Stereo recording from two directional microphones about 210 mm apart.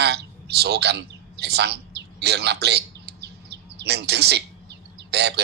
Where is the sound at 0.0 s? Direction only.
50° right (ahead or behind).